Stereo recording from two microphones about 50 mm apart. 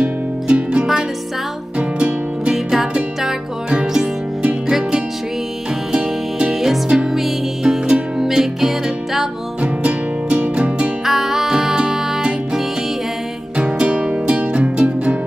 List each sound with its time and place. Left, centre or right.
0.0 s music: right
2.5 s music: centre
7.2 s music: centre
9.6 s music: right
11.1 s music: centre
13.6 s music: centre